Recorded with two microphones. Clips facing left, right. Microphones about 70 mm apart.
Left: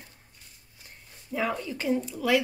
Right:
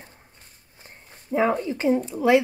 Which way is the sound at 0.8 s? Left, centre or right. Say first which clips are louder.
Right 4 dB; right.